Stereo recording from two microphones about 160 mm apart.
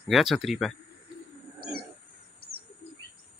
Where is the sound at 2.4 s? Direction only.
80° right.